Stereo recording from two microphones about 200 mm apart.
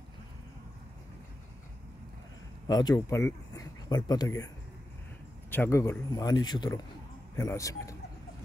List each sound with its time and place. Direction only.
2.7 s speech: 20° left (ahead or behind)
5.5 s speech: 10° left (ahead or behind)